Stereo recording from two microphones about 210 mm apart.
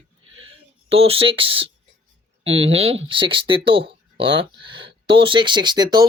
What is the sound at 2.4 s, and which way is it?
Speech, 70° right (ahead or behind).